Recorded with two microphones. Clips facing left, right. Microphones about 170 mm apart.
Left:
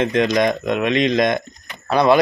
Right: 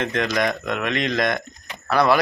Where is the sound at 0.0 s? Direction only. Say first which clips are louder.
Left 5 dB; 20° left (ahead or behind).